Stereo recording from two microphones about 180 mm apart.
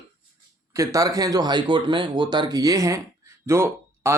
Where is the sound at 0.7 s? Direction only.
20° right (ahead or behind).